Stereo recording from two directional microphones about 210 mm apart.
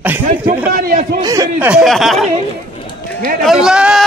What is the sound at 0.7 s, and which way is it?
Speech, 40° right (ahead or behind).